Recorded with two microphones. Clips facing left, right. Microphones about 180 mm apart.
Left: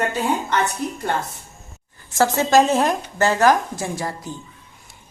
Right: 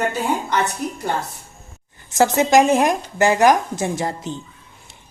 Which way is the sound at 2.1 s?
15° right (ahead or behind).